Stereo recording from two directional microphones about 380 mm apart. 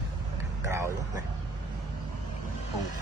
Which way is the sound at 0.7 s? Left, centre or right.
Centre.